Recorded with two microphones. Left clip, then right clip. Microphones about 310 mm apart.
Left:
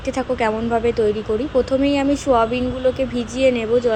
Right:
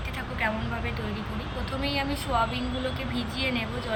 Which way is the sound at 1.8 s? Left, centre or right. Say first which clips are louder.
Left 11 dB; centre.